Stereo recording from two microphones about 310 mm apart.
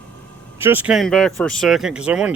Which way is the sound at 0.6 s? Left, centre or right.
Centre.